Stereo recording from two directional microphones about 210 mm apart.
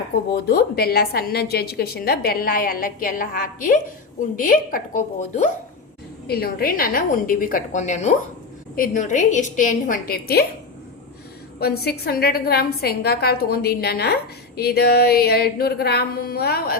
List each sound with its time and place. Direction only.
0.3 s a woman's voice: 50° left (ahead or behind)
6.2 s a woman's voice: 50° left (ahead or behind)
11.6 s a woman's voice: 50° left (ahead or behind)